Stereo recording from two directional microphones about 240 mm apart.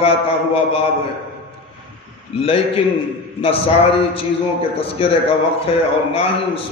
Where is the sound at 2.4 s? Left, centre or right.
Left.